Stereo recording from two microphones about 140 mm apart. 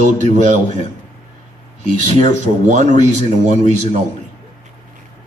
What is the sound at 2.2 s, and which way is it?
Speech, 60° right (ahead or behind).